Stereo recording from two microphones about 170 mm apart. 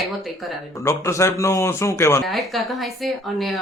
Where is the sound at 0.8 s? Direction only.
15° left (ahead or behind).